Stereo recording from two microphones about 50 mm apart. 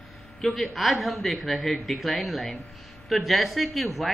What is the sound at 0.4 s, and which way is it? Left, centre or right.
A woman's voice, centre.